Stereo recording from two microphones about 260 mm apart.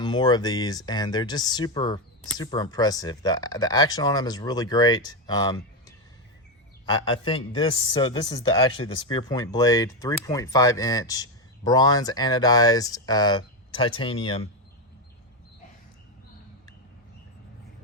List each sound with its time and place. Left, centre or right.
0.0 s speech: centre
6.8 s speech: centre